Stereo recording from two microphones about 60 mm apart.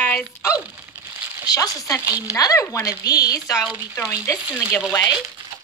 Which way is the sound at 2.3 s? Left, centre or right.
Left.